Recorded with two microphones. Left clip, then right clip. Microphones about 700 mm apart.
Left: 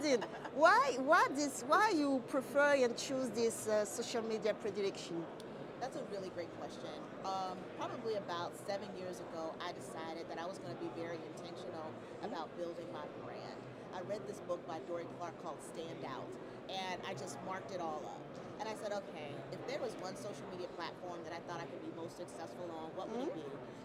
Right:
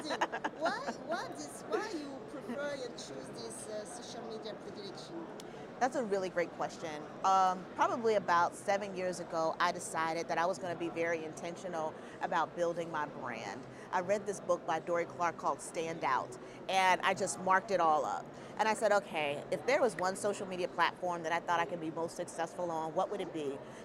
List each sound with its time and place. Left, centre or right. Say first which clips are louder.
0.6 s a woman's voice: left 11 dB; left
5.8 s speech: right 11 dB; right
12.3 s speech: right 12 dB; right